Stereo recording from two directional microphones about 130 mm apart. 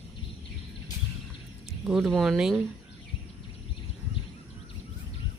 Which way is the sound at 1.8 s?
Centre (ahead or behind).